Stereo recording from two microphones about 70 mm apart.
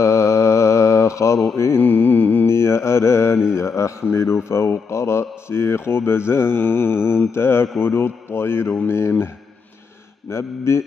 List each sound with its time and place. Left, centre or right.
0.0 s mantra: left
1.8 s music: left
2.4 s speech: left
10.3 s speech: left